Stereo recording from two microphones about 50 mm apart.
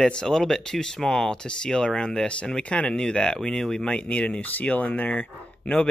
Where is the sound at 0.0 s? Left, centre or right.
Centre.